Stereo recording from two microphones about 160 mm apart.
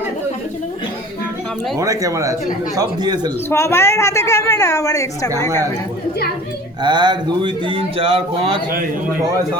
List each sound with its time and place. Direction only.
1.8 s a man's voice: 20° right (ahead or behind)
3.5 s a woman's voice: 15° left (ahead or behind)
6.8 s speech: 25° right (ahead or behind)